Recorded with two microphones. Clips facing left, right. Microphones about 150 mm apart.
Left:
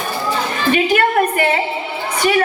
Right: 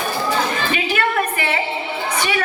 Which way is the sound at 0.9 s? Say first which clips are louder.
Left 5 dB; 40° left (ahead or behind).